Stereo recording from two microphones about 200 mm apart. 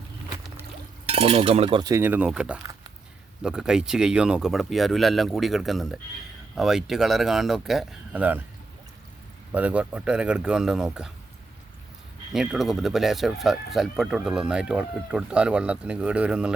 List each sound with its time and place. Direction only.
1.0 s speech: 30° right (ahead or behind); by 8.4 s 5° right (ahead or behind)
9.5 s speech: 5° right (ahead or behind)
12.3 s speech: centre (ahead or behind)